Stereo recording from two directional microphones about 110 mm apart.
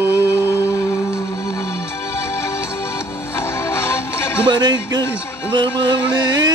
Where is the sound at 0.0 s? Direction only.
20° right (ahead or behind).